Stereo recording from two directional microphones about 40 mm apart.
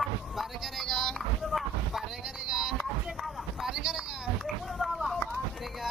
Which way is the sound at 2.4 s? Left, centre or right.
Centre.